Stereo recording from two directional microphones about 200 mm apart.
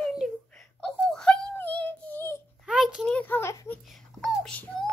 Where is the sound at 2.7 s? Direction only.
5° right (ahead or behind); by 3.8 s 15° left (ahead or behind).